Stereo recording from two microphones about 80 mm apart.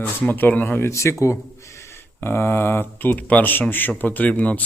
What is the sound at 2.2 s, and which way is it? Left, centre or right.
Speech, left.